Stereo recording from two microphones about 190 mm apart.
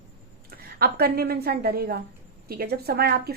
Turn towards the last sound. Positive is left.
turn(degrees=-55)  # may be behind; listen again after turning